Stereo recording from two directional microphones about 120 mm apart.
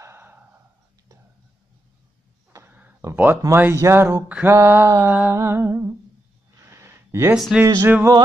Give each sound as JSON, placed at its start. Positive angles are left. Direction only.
{"t": 0.0, "sound": "a sound", "side_deg": -20}
{"t": 2.5, "sound": "a sound", "side_deg": -15}
{"t": 3.8, "sound": "mantra", "side_deg": -25}
{"t": 4.3, "sound": "humming", "side_deg": -10}
{"t": 4.6, "sound": "mantra", "side_deg": -20}
{"t": 5.1, "sound": "humming", "side_deg": -10}
{"t": 5.4, "sound": "mantra", "side_deg": -20}
{"t": 6.6, "sound": "a sound", "side_deg": -20}
{"t": 7.3, "sound": "speech", "side_deg": 0}
{"t": 7.6, "sound": "mantra", "side_deg": -25}